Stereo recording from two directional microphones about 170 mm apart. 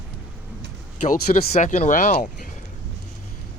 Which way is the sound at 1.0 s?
45° left (ahead or behind).